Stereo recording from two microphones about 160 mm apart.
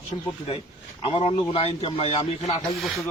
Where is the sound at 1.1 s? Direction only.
40° left (ahead or behind).